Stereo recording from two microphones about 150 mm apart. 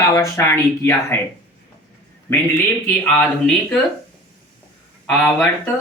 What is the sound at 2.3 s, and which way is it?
A man's voice, 15° left (ahead or behind).